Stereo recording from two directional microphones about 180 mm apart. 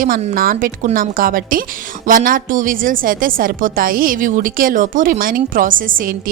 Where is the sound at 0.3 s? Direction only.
50° right (ahead or behind).